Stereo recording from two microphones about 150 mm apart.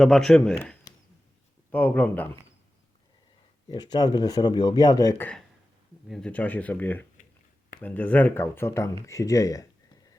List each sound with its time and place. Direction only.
0.0 s speech: 5° left (ahead or behind)
1.7 s speech: 10° left (ahead or behind)
3.7 s speech: 25° left (ahead or behind)
6.1 s speech: 5° left (ahead or behind); by 9.6 s 25° left (ahead or behind)